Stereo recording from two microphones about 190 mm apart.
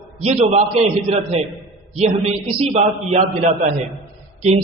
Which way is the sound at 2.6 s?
35° right (ahead or behind).